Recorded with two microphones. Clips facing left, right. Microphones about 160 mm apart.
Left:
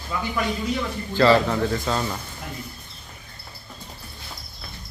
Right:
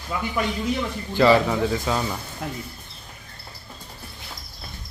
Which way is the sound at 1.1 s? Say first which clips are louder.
Even; 15° right (ahead or behind).